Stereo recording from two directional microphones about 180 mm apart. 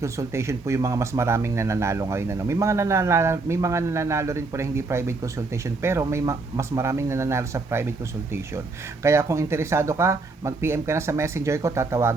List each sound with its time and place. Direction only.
0.0 s speech: 15° right (ahead or behind)